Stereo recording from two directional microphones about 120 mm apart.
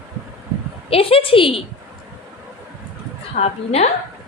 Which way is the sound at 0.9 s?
50° left (ahead or behind).